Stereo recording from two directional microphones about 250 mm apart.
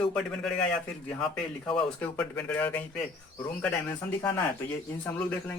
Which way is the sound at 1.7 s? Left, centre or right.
Centre.